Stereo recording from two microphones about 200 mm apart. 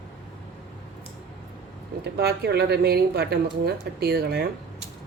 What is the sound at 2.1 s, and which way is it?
Speech, 55° right (ahead or behind).